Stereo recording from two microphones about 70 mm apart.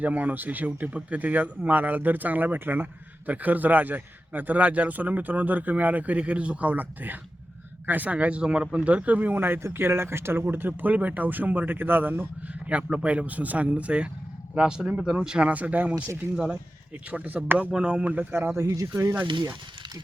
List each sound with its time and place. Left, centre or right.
0.0 s speech: right
12.6 s speech: centre
18.3 s speech: right
18.7 s speech: right